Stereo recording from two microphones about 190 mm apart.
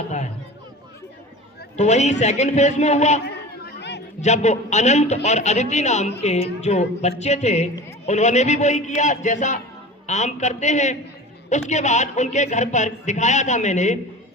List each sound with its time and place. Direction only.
1.7 s a man's voice: 35° left (ahead or behind)
3.2 s chatter: 60° left (ahead or behind)
4.2 s a man's voice: 35° left (ahead or behind)